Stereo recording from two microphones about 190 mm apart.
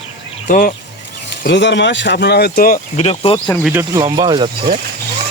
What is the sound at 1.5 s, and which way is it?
Speech, 70° left (ahead or behind).